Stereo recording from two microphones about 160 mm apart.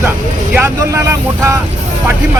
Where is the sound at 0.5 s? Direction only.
15° right (ahead or behind).